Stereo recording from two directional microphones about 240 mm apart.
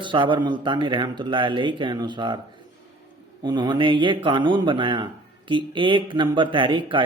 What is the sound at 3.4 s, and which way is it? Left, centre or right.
A man's voice, centre.